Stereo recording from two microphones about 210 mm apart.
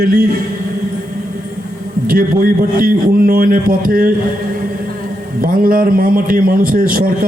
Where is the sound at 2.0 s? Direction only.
45° right (ahead or behind).